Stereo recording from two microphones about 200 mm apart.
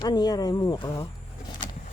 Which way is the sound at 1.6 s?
40° left (ahead or behind).